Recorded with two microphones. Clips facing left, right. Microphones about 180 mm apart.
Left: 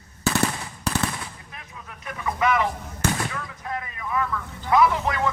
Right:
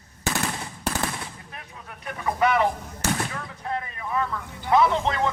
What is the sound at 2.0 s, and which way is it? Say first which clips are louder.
Speech: right 1 dB; 35° right (ahead or behind).